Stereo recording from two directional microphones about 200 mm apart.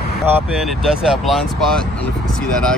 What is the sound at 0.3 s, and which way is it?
Speech, centre (ahead or behind).